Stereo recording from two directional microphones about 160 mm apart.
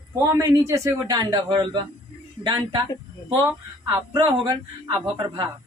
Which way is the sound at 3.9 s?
25° right (ahead or behind).